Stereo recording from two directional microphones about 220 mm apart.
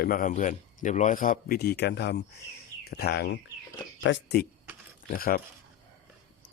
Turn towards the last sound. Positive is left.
turn(degrees=40)  # may be behind; listen again after turning